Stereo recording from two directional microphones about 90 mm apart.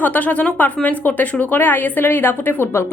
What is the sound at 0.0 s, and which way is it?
A woman's voice, 20° left (ahead or behind).